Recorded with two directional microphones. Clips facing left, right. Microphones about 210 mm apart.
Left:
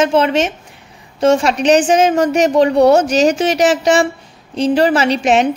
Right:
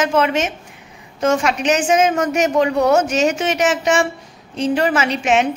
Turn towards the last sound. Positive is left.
turn(degrees=35)  # may be behind; listen again after turning